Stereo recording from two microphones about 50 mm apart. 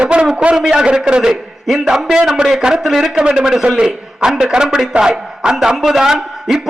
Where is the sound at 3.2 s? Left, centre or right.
Centre.